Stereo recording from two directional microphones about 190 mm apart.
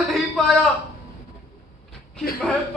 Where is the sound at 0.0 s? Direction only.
Centre (ahead or behind).